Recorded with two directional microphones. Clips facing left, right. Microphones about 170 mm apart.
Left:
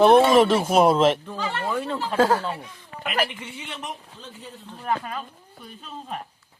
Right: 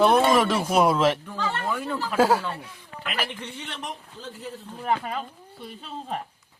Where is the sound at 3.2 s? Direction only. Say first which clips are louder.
Right 1 dB; 5° left (ahead or behind).